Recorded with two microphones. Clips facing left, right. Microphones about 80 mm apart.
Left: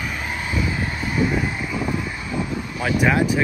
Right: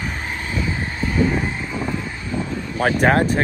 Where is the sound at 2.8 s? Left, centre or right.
Right.